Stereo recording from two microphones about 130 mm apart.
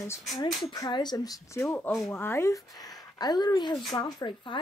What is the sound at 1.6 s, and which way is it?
Speech, 5° left (ahead or behind).